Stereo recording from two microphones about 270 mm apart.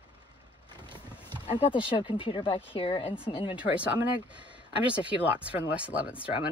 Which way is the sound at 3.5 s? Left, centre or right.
Centre.